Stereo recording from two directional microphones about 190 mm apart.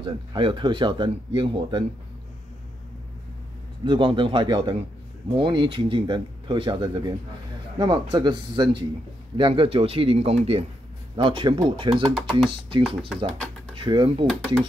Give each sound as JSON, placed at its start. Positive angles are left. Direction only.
{"t": 0.0, "sound": "speech", "side_deg": -25}
{"t": 3.8, "sound": "speech", "side_deg": -25}
{"t": 14.2, "sound": "speech", "side_deg": 0}